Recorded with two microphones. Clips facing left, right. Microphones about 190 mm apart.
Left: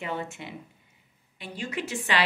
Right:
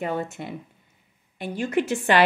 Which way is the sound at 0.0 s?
45° right (ahead or behind).